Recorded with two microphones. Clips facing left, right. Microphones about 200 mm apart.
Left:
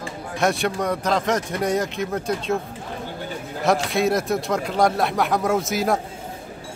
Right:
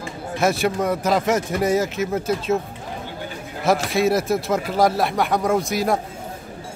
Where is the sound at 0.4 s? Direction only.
Centre (ahead or behind).